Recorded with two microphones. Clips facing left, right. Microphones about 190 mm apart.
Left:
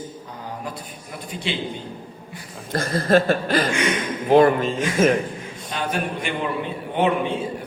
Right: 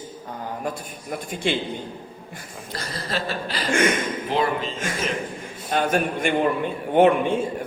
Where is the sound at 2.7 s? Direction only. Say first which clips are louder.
Left 12 dB; 50° left (ahead or behind).